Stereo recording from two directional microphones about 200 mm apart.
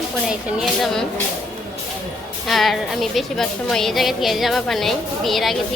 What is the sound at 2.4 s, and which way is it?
A woman's voice, centre (ahead or behind).